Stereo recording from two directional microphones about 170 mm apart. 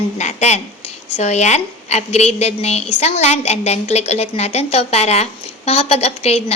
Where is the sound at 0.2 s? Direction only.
40° left (ahead or behind).